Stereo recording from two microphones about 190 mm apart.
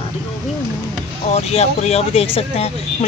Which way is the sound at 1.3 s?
35° left (ahead or behind).